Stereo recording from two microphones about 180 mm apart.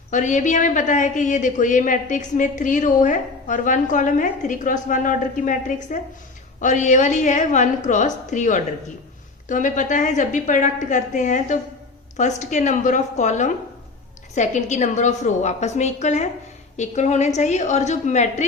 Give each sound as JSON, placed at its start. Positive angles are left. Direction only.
{"t": 0.1, "sound": "a woman's voice", "side_deg": 45}